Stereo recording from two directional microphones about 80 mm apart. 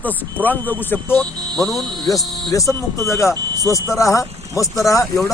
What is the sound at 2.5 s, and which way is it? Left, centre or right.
Speech, left.